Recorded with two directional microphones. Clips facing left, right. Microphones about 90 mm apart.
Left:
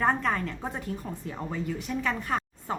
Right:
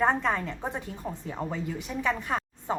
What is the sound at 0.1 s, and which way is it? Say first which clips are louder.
A woman's voice: even; 20° right (ahead or behind).